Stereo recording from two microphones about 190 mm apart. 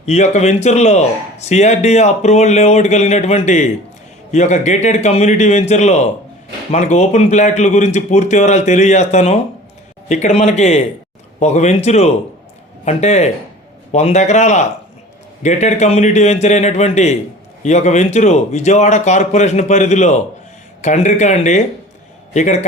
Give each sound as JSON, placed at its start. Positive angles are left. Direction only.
{"t": 0.0, "sound": "a man's voice", "side_deg": 35}